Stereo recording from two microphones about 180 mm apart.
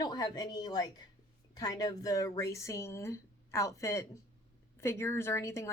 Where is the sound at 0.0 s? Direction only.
25° left (ahead or behind).